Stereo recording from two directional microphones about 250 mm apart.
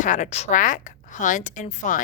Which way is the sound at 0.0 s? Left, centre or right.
Left.